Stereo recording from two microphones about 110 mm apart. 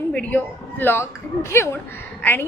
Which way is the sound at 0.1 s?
10° left (ahead or behind).